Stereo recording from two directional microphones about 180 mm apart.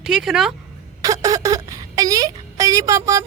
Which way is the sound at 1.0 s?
20° right (ahead or behind).